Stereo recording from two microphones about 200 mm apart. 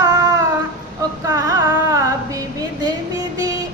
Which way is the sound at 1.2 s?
15° right (ahead or behind).